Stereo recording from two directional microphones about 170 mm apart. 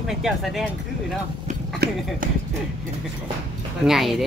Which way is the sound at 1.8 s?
70° right (ahead or behind).